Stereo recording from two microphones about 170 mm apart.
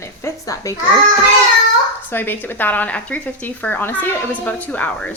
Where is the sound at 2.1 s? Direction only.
10° left (ahead or behind).